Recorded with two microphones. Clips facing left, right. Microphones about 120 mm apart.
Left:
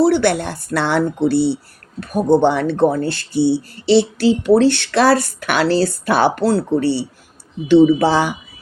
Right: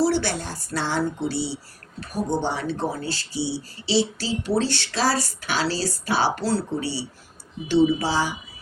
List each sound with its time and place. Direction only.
0.0 s speech: 60° left (ahead or behind)